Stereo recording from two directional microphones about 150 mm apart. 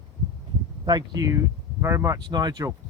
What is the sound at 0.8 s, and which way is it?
Speech, 25° right (ahead or behind).